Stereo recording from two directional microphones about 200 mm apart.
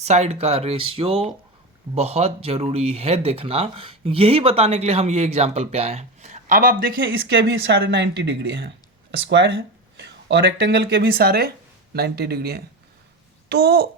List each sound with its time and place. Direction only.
0.0 s speech: 35° right (ahead or behind)
7.0 s speech: 60° right (ahead or behind)